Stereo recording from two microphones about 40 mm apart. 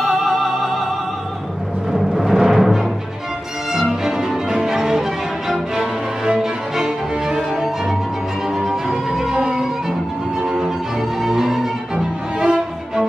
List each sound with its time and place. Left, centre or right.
0.0 s music: centre
1.9 s timpani: centre
3.7 s music: centre